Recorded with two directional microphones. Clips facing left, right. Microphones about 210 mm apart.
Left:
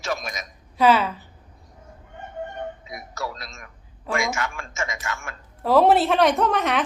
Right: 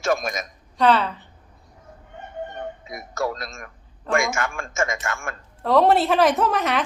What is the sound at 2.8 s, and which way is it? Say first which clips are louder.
Speech: right 6 dB; 50° right (ahead or behind).